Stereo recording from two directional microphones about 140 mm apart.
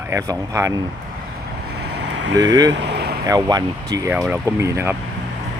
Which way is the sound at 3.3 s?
30° right (ahead or behind).